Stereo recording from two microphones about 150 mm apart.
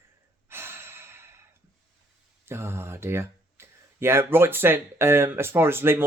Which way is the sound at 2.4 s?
15° right (ahead or behind).